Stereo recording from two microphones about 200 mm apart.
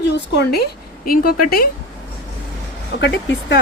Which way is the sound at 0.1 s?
55° left (ahead or behind).